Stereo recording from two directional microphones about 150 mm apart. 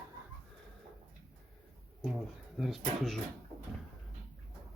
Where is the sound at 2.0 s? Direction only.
Centre (ahead or behind).